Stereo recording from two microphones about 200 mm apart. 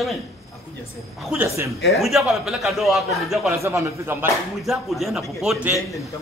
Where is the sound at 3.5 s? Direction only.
15° right (ahead or behind).